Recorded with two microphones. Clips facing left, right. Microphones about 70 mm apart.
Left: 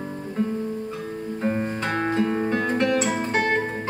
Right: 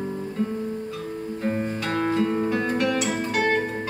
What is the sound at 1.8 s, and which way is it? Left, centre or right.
Music, left.